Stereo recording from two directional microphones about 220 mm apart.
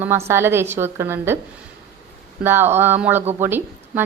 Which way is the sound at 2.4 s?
10° right (ahead or behind).